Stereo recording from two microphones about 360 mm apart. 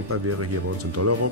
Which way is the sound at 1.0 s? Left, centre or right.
Right.